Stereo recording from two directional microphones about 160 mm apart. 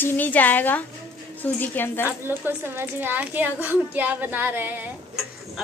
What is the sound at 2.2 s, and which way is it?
A child's voice, 10° right (ahead or behind).